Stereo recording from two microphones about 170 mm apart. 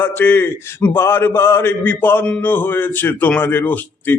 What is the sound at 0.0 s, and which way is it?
Speech, 10° left (ahead or behind).